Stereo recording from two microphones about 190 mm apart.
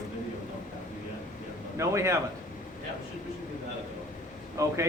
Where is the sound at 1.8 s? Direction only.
15° right (ahead or behind).